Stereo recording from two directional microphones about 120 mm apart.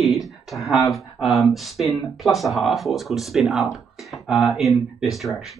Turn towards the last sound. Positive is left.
turn(degrees=0)  # may be behind; listen again after turning